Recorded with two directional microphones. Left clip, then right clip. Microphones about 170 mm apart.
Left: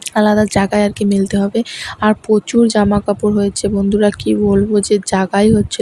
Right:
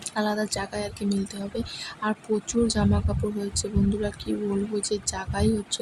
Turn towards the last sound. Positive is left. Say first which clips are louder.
# left 14 dB
turn(degrees=50)  # may be behind; listen again after turning